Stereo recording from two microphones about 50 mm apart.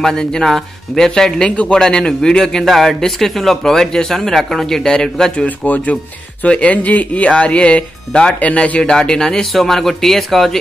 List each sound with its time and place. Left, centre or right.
0.0 s speech: centre
5.6 s speech: left
8.4 s speech: left
8.9 s a man's voice: centre